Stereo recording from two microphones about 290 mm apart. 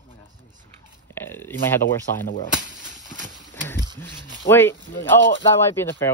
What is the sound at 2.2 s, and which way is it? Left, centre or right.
Speech, left.